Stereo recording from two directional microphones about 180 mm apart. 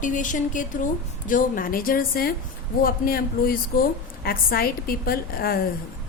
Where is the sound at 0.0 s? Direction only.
45° left (ahead or behind).